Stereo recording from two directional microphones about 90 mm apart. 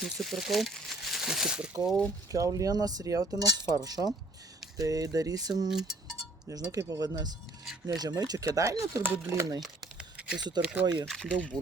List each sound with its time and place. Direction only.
0.0 s speech: centre (ahead or behind)
2.3 s speech: 40° right (ahead or behind)
5.6 s a sound: 5° right (ahead or behind)
6.5 s speech: 40° right (ahead or behind)
9.0 s speech: 25° right (ahead or behind)
9.6 s a sound: 5° right (ahead or behind)
10.6 s speech: 10° right (ahead or behind)
11.0 s speech: 5° left (ahead or behind)